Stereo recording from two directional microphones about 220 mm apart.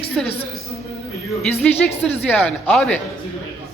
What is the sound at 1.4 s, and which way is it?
A man's voice, 5° left (ahead or behind).